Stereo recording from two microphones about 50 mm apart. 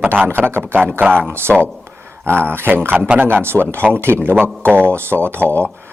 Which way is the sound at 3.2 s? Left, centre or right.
Right.